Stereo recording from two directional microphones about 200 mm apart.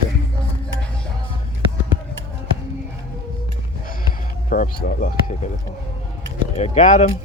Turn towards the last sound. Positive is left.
turn(degrees=35)  # may be behind; listen again after turning